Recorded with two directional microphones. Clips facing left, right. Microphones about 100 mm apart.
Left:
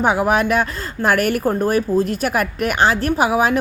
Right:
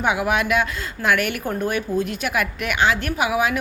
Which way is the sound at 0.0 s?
35° left (ahead or behind).